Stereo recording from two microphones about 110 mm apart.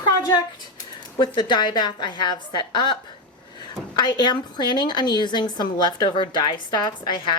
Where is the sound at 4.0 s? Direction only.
40° left (ahead or behind).